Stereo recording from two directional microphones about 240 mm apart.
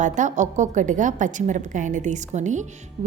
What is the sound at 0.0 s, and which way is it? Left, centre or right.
A woman's voice, right.